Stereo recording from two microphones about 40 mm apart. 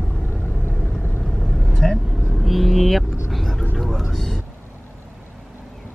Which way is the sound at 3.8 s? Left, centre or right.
Centre.